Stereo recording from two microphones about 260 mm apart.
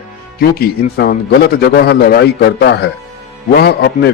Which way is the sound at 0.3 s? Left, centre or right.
Left.